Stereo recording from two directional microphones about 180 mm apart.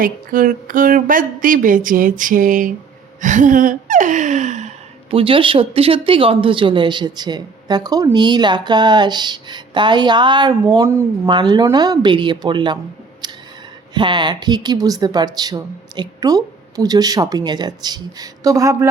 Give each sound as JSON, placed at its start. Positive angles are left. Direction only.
{"t": 0.0, "sound": "speech", "side_deg": -50}
{"t": 3.2, "sound": "gasp", "side_deg": -45}
{"t": 5.1, "sound": "speech", "side_deg": -30}
{"t": 13.2, "sound": "a sound", "side_deg": -25}
{"t": 13.9, "sound": "speech", "side_deg": -25}